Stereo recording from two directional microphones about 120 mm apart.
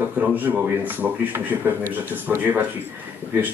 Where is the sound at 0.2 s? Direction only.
15° right (ahead or behind).